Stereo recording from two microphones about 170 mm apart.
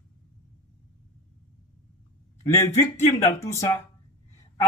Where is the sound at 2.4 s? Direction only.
15° left (ahead or behind).